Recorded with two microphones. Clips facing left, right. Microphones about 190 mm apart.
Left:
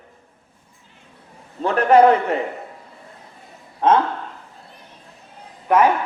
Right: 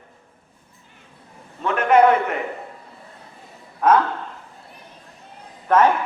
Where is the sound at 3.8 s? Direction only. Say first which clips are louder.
Even; 25° left (ahead or behind).